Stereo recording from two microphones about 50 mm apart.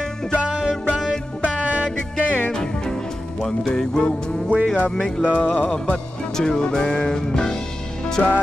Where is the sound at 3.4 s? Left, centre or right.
Centre.